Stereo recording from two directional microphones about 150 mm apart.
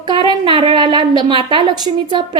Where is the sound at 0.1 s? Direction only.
30° right (ahead or behind).